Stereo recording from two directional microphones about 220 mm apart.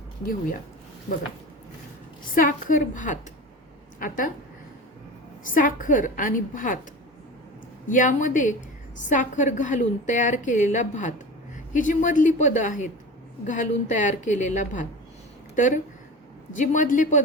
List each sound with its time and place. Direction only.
2.3 s a woman's voice: 35° left (ahead or behind)
5.4 s a woman's voice: 35° left (ahead or behind)
7.9 s a woman's voice: 35° left (ahead or behind)